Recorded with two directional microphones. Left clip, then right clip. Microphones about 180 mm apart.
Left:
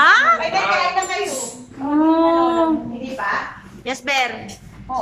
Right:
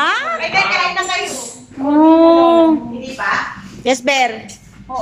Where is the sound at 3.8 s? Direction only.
25° right (ahead or behind).